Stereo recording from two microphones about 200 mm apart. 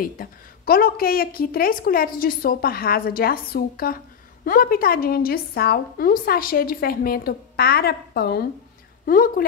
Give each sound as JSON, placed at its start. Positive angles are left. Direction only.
{"t": 0.0, "sound": "a woman's voice", "side_deg": 45}